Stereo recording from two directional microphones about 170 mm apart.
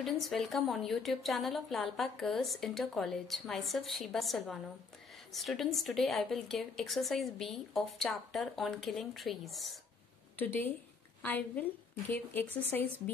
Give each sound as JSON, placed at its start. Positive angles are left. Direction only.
{"t": 0.0, "sound": "a woman's voice", "side_deg": 0}
{"t": 10.4, "sound": "speech", "side_deg": 10}